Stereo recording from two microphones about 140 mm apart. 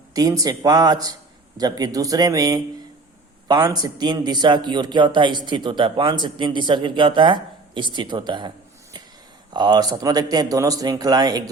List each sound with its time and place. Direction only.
0.1 s speech: 25° right (ahead or behind)